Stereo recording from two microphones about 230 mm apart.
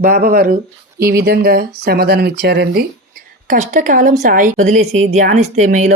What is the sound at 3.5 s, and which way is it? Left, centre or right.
A woman's voice, right.